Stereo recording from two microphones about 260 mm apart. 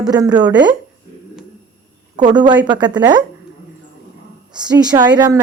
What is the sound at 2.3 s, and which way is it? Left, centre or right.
Speech, centre.